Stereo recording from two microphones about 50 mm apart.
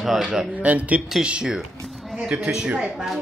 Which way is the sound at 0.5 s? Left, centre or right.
Right.